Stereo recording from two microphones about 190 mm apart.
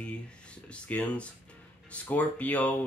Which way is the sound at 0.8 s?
5° left (ahead or behind).